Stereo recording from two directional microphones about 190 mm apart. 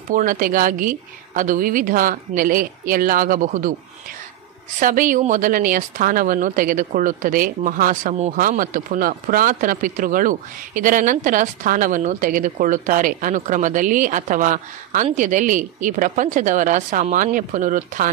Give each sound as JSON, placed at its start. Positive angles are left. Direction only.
{"t": 0.1, "sound": "speech", "side_deg": -45}
{"t": 4.7, "sound": "speech", "side_deg": -45}